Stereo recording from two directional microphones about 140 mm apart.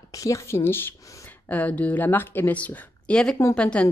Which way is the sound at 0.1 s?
20° left (ahead or behind).